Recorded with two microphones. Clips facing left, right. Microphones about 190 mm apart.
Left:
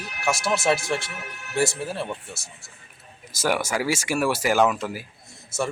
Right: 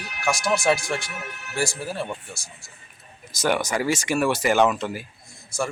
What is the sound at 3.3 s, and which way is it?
Speech, 5° left (ahead or behind).